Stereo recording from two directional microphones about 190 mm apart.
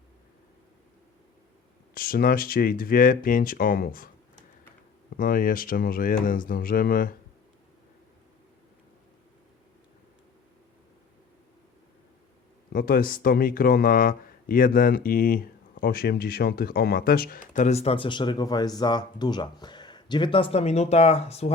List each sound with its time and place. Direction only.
2.0 s speech: 50° left (ahead or behind)
5.1 s speech: 45° left (ahead or behind)
12.7 s speech: 50° left (ahead or behind); by 21.5 s 35° left (ahead or behind)